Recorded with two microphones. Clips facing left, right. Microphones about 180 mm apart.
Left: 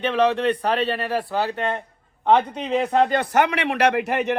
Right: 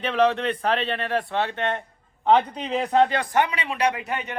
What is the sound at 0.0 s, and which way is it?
A man's voice, centre (ahead or behind).